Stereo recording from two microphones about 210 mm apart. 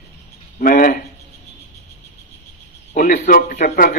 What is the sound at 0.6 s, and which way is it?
Speech, 45° left (ahead or behind).